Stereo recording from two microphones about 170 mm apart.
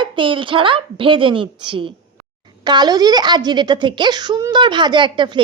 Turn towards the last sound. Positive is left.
turn(degrees=-25)  # may be behind; listen again after turning